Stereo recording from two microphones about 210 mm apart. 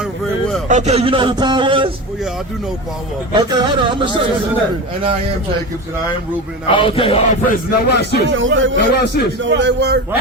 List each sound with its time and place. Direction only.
0.7 s a man's voice: 35° right (ahead or behind)
3.3 s a man's voice: 20° right (ahead or behind)
6.7 s speech: 25° left (ahead or behind); by 8.2 s 50° left (ahead or behind)
8.3 s speech: 65° right (ahead or behind)
8.9 s a man's voice: 50° left (ahead or behind)
9.4 s speech: 60° right (ahead or behind)